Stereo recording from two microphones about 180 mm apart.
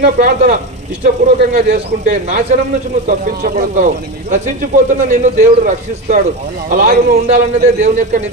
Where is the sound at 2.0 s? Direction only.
45° right (ahead or behind).